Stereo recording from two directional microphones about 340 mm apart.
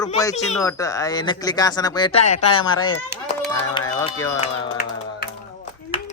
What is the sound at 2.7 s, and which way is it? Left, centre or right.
Speech, left.